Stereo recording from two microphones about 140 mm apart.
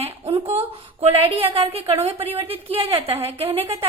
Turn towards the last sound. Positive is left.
turn(degrees=-45)  # may be behind; listen again after turning